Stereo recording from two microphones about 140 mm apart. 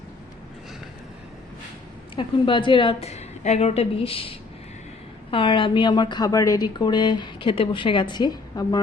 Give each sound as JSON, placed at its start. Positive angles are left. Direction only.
{"t": 2.1, "sound": "a woman's voice", "side_deg": 35}